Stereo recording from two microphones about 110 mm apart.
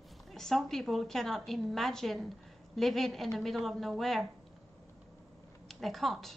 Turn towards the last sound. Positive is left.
turn(degrees=0)  # may be behind; listen again after turning